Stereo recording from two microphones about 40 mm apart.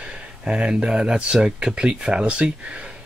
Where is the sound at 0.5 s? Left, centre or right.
Right.